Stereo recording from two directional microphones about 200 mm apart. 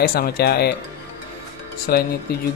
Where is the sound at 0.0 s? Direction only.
50° left (ahead or behind).